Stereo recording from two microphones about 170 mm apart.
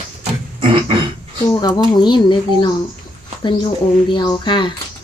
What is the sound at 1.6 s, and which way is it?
Speech, 25° left (ahead or behind).